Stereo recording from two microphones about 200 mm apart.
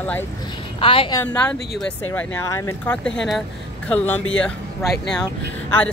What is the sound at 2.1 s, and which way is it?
Speech, 10° left (ahead or behind).